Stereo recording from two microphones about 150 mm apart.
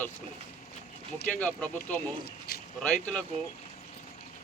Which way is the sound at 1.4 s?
10° left (ahead or behind).